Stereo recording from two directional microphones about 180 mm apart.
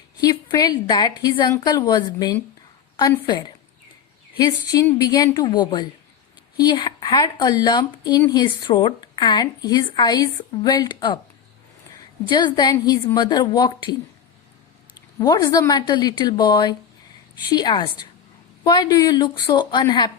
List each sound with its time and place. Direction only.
0.2 s speech: 20° left (ahead or behind)
12.3 s speech: 25° left (ahead or behind)
15.2 s speech: 20° left (ahead or behind)